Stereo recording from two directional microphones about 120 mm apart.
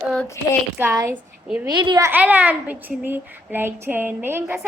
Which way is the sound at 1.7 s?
40° right (ahead or behind).